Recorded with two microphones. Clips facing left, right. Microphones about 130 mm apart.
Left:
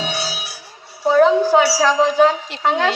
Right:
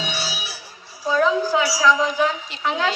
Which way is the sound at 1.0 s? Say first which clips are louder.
Left 6 dB; 65° left (ahead or behind).